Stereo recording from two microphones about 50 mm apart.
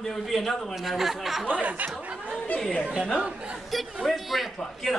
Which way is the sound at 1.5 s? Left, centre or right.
Right.